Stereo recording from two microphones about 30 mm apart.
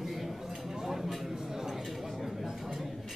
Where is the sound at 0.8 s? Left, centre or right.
Centre.